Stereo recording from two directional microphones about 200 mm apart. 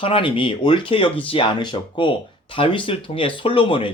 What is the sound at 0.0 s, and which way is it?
Speech, 25° left (ahead or behind).